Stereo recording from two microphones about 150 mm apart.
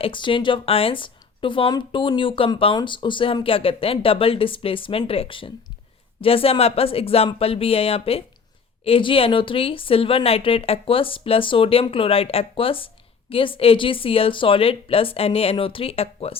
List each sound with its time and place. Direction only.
0.0 s a woman's voice: 35° left (ahead or behind)